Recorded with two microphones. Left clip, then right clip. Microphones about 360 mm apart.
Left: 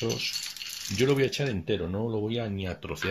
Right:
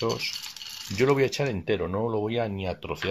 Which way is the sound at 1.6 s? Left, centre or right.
Right.